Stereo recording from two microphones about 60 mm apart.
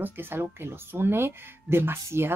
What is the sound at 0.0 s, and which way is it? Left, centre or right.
Speech, right.